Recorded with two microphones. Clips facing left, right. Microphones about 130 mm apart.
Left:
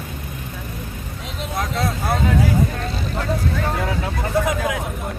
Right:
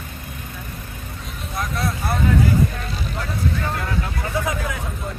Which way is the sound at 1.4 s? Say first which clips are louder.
Left 3 dB; 85° left.